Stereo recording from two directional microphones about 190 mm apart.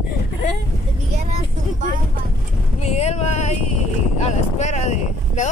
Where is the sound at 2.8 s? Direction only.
35° left (ahead or behind).